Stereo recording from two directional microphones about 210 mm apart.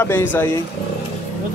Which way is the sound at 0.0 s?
10° left (ahead or behind).